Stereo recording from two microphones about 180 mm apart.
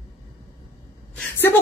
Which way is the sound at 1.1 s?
5° left (ahead or behind).